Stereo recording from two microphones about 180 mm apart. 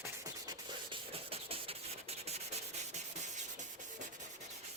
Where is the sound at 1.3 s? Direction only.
30° right (ahead or behind).